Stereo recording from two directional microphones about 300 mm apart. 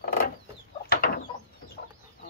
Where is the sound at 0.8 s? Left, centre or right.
Left.